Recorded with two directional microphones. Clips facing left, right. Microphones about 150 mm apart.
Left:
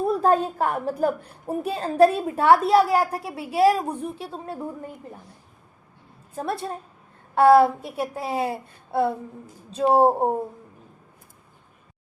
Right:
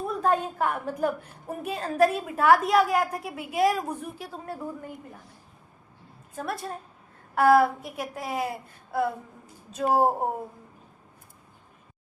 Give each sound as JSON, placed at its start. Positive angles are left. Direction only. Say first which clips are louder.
{"t": 0.1, "sound": "a woman's voice", "louder": "left 3 dB", "side_deg": 35}
{"t": 6.3, "sound": "a child's voice", "louder": "left 4 dB", "side_deg": 30}